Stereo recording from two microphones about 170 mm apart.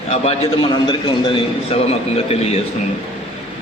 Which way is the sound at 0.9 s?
30° left (ahead or behind).